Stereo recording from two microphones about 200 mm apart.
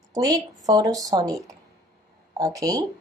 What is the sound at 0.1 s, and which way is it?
Speech, 15° right (ahead or behind).